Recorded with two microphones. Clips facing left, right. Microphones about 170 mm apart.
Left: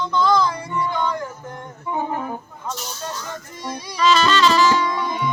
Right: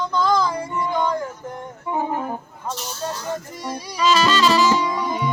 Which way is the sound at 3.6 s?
10° right (ahead or behind).